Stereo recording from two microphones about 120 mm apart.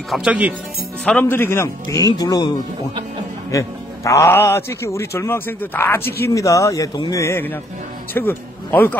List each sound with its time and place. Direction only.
0.1 s speech: 10° right (ahead or behind)
1.0 s a man's voice: 15° left (ahead or behind); by 2.5 s 30° left (ahead or behind)
3.5 s a man's voice: 25° left (ahead or behind)